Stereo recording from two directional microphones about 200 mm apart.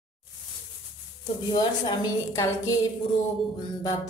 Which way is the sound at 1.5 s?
25° left (ahead or behind).